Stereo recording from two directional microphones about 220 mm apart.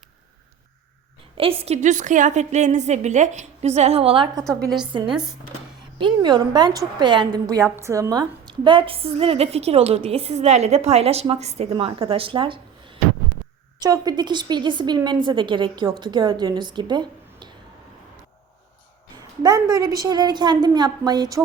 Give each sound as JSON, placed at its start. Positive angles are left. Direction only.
{"t": 1.4, "sound": "a woman's voice", "side_deg": -25}
{"t": 4.4, "sound": "a woman's voice", "side_deg": 0}
{"t": 4.8, "sound": "a woman's voice", "side_deg": -20}
{"t": 19.4, "sound": "a woman's voice", "side_deg": -15}